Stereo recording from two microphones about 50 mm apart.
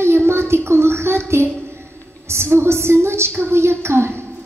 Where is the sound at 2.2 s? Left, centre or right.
Right.